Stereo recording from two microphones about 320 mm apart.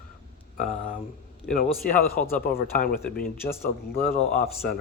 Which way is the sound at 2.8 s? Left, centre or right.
Left.